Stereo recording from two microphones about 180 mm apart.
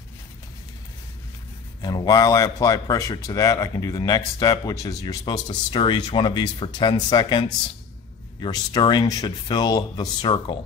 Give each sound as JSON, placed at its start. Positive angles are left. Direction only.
{"t": 1.8, "sound": "speech", "side_deg": 20}